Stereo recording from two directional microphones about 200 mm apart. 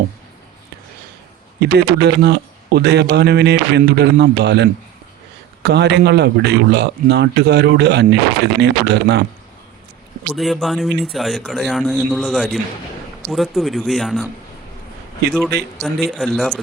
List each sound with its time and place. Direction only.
1.6 s a man's voice: 55° right (ahead or behind)
10.3 s speech: centre (ahead or behind)
15.3 s speech: centre (ahead or behind)